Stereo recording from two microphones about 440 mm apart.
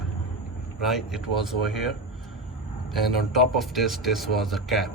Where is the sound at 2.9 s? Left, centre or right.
Centre.